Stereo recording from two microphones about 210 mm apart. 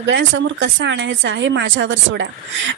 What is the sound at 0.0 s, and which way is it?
Speech, 60° right (ahead or behind).